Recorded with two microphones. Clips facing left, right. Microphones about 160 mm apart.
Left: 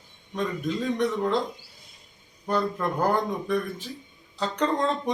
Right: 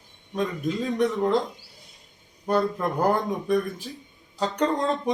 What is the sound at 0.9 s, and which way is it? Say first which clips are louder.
Speech: right 5 dB; 10° right (ahead or behind).